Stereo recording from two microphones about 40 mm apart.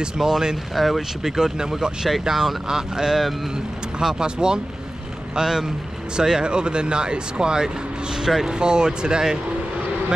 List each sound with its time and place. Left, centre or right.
0.0 s speech: centre
0.7 s speech: centre
1.2 s speech: centre